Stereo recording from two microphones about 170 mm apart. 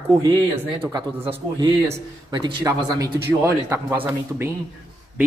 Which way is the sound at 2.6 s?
20° right (ahead or behind).